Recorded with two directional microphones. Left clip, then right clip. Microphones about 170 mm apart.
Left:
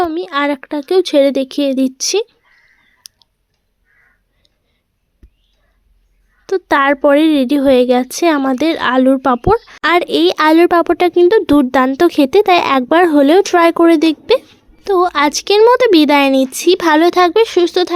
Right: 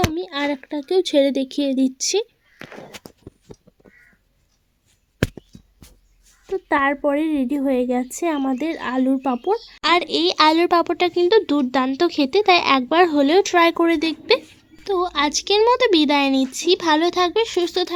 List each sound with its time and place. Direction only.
0.1 s speech: 30° left (ahead or behind)
6.4 s speech: 35° left (ahead or behind)
8.0 s speech: 25° left (ahead or behind)